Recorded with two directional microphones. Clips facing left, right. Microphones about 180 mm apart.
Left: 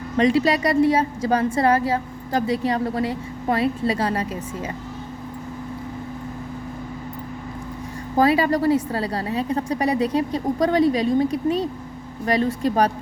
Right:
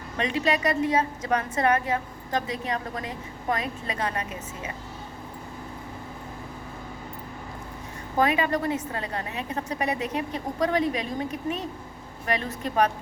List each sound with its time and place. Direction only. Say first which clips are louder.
0.2 s a woman's voice: left 7 dB; 35° left (ahead or behind)
8.2 s a woman's voice: left 6 dB; 35° left (ahead or behind)